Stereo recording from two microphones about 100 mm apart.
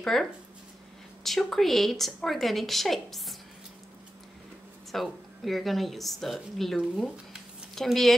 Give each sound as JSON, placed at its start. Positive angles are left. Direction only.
{"t": 0.0, "sound": "a woman's voice", "side_deg": 5}
{"t": 4.9, "sound": "a woman's voice", "side_deg": 0}
{"t": 7.0, "sound": "a sound", "side_deg": 0}